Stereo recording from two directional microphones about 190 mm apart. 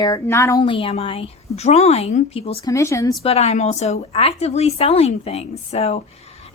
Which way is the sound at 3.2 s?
35° left (ahead or behind).